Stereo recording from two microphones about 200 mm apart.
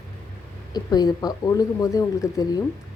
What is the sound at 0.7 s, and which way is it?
A woman's voice, 20° left (ahead or behind).